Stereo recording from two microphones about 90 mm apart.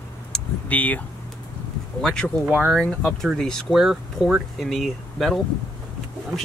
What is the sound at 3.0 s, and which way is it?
Speech, 10° left (ahead or behind).